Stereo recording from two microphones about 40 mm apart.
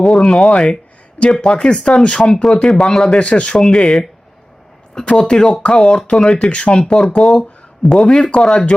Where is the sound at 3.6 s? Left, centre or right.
Centre.